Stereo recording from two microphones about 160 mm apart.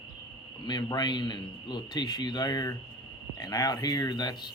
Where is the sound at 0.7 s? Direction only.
25° left (ahead or behind).